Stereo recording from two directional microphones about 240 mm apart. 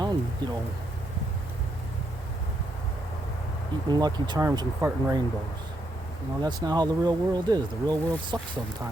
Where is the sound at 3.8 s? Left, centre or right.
Centre.